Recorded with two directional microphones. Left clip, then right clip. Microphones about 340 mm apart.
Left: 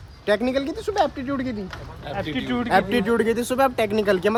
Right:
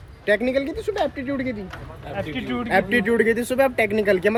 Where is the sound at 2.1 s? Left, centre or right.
Left.